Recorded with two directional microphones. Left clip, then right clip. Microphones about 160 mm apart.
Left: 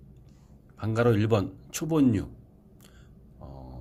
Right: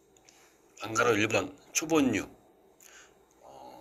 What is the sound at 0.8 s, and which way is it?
Speech, 35° left (ahead or behind).